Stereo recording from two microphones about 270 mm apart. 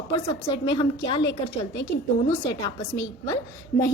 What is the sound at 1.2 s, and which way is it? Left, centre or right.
Speech, left.